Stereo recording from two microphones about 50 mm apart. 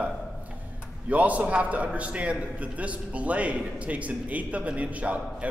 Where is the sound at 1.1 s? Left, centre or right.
Right.